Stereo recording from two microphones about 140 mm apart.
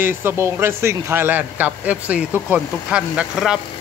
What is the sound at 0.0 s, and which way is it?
A man's voice, 15° right (ahead or behind).